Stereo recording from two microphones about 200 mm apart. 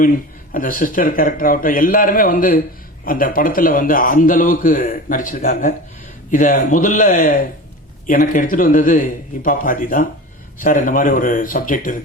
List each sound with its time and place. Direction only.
0.5 s a man's voice: 45° left (ahead or behind)